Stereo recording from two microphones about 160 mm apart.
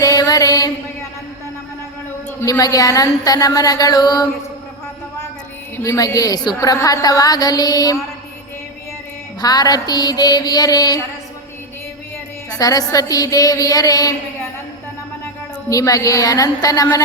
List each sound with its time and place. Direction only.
0.0 s chant: 20° left (ahead or behind)
2.4 s a woman's voice: 20° left (ahead or behind)
5.7 s a woman's voice: 20° left (ahead or behind)
9.4 s a woman's voice: 25° left (ahead or behind)
12.5 s a woman's voice: 25° left (ahead or behind)
15.7 s a woman's voice: 20° left (ahead or behind)